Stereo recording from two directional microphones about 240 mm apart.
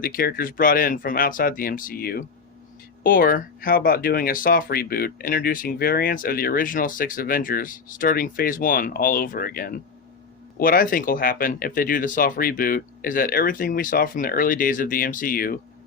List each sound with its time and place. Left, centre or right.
0.0 s speech: left